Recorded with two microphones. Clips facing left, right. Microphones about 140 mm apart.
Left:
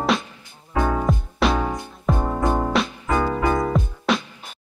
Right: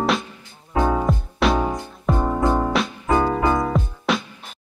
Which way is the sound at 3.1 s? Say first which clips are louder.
Right 4 dB; 20° right (ahead or behind).